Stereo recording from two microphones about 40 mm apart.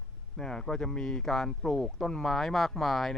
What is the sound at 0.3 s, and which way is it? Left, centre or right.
Speech, centre.